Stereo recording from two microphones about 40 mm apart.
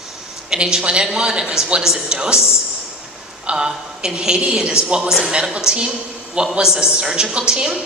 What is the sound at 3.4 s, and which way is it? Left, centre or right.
A woman's voice, centre.